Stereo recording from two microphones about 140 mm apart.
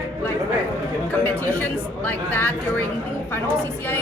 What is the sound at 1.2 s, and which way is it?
A woman's voice, 10° left (ahead or behind).